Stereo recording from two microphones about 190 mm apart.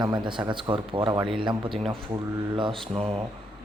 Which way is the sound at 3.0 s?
30° right (ahead or behind).